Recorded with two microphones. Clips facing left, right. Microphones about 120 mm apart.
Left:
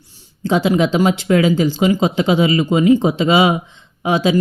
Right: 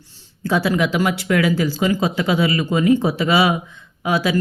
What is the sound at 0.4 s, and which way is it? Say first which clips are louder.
Speech: left 4 dB; 20° left (ahead or behind).